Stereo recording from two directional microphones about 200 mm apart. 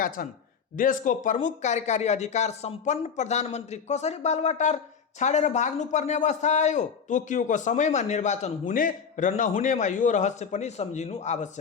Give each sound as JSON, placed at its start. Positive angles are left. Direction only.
{"t": 0.2, "sound": "a man's voice", "side_deg": 45}